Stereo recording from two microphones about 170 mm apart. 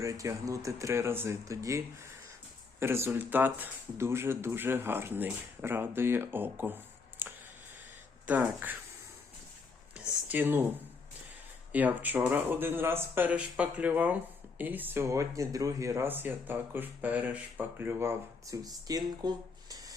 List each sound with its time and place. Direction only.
0.0 s speech: 20° right (ahead or behind)
2.8 s speech: 15° right (ahead or behind)
9.9 s a sound: 10° right (ahead or behind)
11.7 s speech: 10° right (ahead or behind)